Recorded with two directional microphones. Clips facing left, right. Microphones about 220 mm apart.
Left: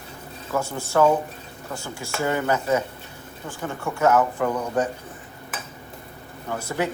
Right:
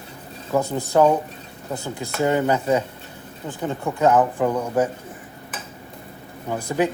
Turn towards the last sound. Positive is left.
turn(degrees=-15)  # may be behind; listen again after turning